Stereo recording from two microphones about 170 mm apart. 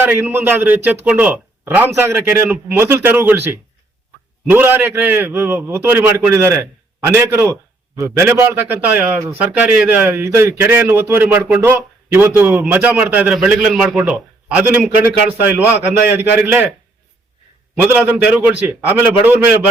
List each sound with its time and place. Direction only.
0.0 s a man's voice: 10° right (ahead or behind)
17.7 s a man's voice: 10° right (ahead or behind)